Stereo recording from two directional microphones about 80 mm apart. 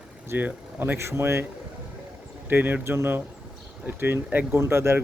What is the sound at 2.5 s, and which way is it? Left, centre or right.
Speech, right.